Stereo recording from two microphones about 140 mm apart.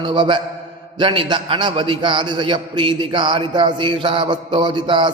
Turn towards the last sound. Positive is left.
turn(degrees=-35)  # may be behind; listen again after turning